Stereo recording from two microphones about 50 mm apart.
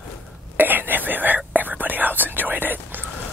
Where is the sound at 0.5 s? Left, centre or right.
Right.